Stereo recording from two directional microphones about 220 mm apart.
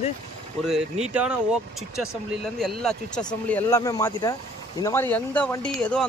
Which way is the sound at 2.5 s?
Centre (ahead or behind).